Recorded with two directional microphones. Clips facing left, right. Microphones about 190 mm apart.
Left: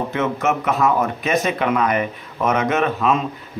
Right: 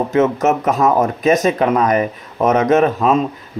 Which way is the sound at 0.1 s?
40° right (ahead or behind).